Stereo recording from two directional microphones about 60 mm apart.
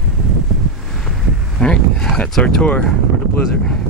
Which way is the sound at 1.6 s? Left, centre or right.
Centre.